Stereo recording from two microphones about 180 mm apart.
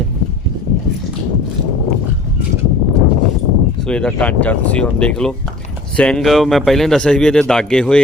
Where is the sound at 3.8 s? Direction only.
5° left (ahead or behind).